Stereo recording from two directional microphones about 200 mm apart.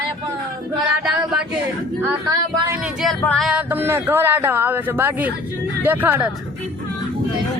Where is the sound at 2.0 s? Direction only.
15° right (ahead or behind).